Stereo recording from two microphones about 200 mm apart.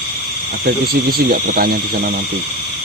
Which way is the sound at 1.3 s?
50° right (ahead or behind).